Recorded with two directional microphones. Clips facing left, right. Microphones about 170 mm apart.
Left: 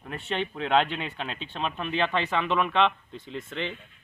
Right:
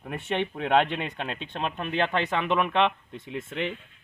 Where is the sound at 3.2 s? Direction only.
5° right (ahead or behind).